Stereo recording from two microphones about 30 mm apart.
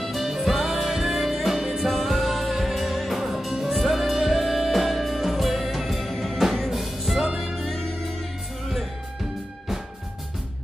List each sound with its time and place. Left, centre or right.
0.0 s music: centre